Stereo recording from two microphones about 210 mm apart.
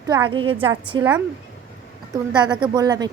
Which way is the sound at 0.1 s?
20° right (ahead or behind).